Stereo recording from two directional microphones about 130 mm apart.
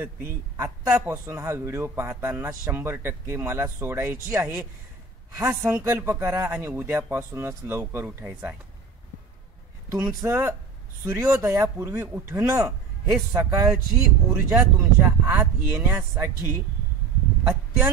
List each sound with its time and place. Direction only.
0.0 s a man's voice: 20° right (ahead or behind)
9.8 s a man's voice: 25° right (ahead or behind)